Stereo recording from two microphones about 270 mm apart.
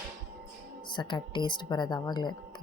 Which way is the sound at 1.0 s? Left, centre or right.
Centre.